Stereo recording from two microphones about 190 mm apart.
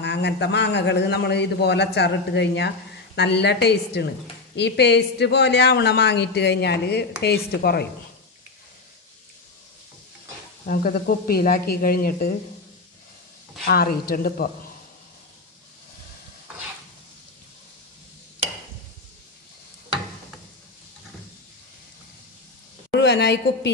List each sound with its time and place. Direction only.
0.0 s a man's voice: 65° left (ahead or behind)
10.7 s speech: 50° left (ahead or behind)
13.7 s speech: 50° left (ahead or behind)
22.8 s a sound: 65° left (ahead or behind)